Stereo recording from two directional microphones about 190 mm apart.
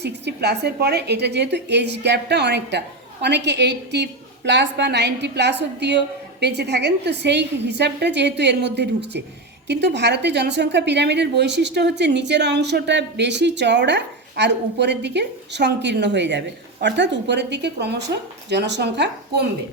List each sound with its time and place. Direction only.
0.0 s a woman's voice: 60° right (ahead or behind)